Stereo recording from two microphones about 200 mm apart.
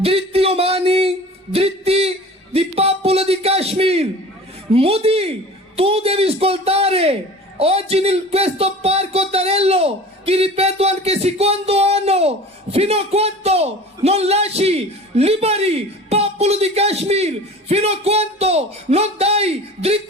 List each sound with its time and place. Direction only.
0.0 s speech: 30° right (ahead or behind)
1.5 s a sound: 30° right (ahead or behind)
4.7 s a man's voice: 30° right (ahead or behind)